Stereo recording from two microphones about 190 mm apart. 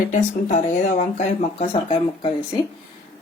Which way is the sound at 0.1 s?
40° left (ahead or behind).